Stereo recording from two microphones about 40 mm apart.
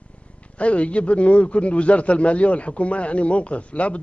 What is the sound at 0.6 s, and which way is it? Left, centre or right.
A man's voice, left.